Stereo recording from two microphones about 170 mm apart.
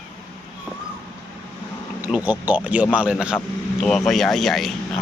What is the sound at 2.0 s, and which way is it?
A man's voice, 10° right (ahead or behind).